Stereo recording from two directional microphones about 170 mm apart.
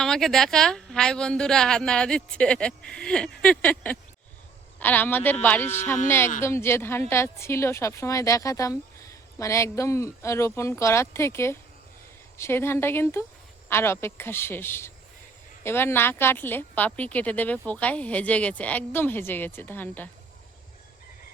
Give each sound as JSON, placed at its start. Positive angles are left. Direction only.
{"t": 0.0, "sound": "speech", "side_deg": 0}